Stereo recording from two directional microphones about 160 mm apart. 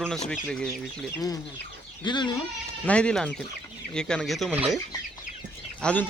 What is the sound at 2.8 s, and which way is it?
Speech, 5° left (ahead or behind).